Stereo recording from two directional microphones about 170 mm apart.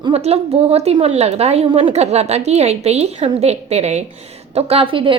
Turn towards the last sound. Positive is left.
turn(degrees=-30)  # may be behind; listen again after turning